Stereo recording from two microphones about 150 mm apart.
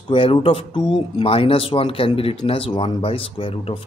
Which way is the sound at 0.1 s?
40° left (ahead or behind).